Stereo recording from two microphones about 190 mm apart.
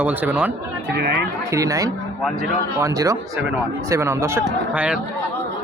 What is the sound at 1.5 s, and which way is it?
Speech, 15° right (ahead or behind).